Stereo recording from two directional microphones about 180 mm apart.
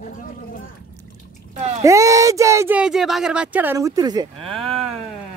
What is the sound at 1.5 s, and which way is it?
Speech, 40° right (ahead or behind).